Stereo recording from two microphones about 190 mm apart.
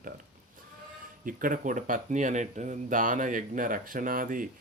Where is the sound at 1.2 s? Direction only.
45° right (ahead or behind).